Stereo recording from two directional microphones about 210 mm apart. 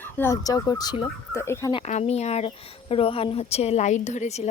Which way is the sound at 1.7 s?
30° left (ahead or behind).